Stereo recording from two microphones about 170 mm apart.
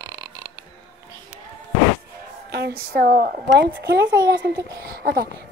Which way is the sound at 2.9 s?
60° right (ahead or behind).